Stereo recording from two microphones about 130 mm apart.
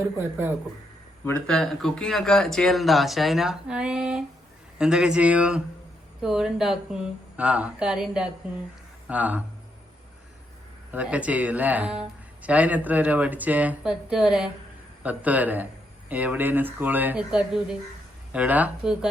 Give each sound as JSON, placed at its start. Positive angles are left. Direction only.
{"t": 0.2, "sound": "speech", "side_deg": -15}
{"t": 1.5, "sound": "speech", "side_deg": 5}
{"t": 10.9, "sound": "speech", "side_deg": -10}